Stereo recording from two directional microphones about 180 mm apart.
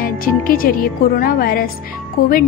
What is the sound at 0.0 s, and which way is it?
A woman's voice, 50° left (ahead or behind).